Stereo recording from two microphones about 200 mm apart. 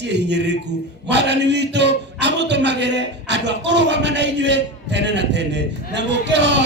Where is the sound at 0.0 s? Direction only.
60° right (ahead or behind).